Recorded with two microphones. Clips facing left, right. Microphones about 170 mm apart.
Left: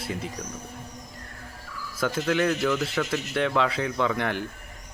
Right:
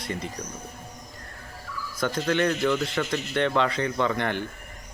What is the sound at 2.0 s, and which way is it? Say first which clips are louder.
A man's voice: even; 5° left (ahead or behind).